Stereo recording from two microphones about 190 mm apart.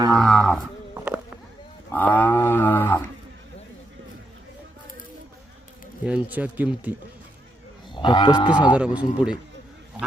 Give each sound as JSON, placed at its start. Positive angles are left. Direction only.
{"t": 0.2, "sound": "a sound", "side_deg": 0}
{"t": 1.9, "sound": "cattle", "side_deg": 10}
{"t": 6.1, "sound": "speech", "side_deg": -10}
{"t": 7.9, "sound": "speech", "side_deg": 25}
{"t": 8.7, "sound": "speech", "side_deg": -5}